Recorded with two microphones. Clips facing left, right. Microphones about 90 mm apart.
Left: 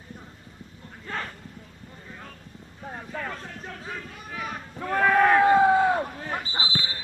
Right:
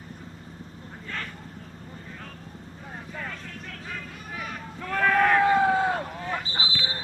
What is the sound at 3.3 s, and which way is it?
Vehicle, 25° left (ahead or behind).